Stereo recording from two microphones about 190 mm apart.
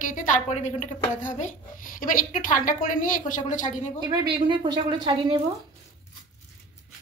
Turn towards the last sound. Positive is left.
turn(degrees=-25)  # may be behind; listen again after turning